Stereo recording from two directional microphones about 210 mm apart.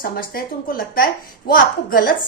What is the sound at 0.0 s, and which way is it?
A woman's voice, 45° left (ahead or behind).